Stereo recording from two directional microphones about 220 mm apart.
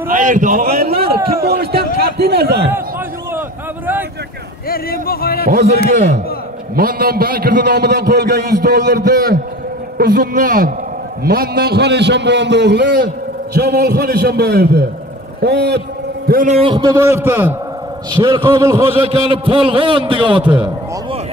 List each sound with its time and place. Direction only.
0.1 s a man's voice: 35° right (ahead or behind)
3.3 s a sound: 10° right (ahead or behind)
4.6 s speech: 45° left (ahead or behind)
5.5 s a man's voice: 45° right (ahead or behind)
16.3 s a man's voice: 35° right (ahead or behind)
17.2 s a man's voice: 10° right (ahead or behind)
18.1 s a man's voice: 20° right (ahead or behind)
18.9 s a man's voice: 25° right (ahead or behind)